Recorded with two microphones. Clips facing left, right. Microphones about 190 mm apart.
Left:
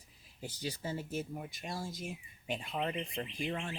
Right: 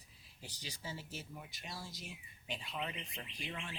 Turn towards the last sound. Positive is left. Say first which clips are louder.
# left 8 dB
turn(degrees=45)  # may be behind; listen again after turning